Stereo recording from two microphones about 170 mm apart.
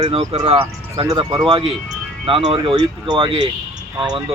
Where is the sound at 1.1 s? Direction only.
25° right (ahead or behind).